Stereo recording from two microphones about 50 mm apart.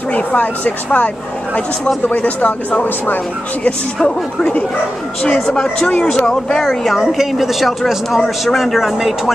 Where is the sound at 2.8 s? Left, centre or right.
Left.